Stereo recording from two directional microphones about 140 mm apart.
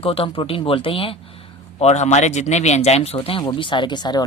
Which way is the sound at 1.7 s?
50° left (ahead or behind).